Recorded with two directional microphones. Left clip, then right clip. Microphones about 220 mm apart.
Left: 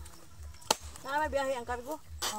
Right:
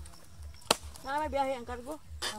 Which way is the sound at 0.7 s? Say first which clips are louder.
Right 2 dB; 15° left (ahead or behind).